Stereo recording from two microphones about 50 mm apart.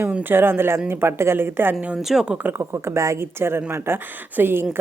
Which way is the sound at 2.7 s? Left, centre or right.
Right.